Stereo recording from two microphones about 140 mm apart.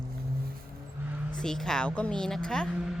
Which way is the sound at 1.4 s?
5° left (ahead or behind).